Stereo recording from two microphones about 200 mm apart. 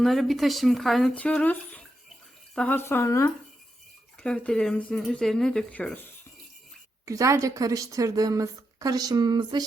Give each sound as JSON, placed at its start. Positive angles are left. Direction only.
{"t": 0.0, "sound": "speech", "side_deg": 0}
{"t": 7.0, "sound": "a woman's voice", "side_deg": -15}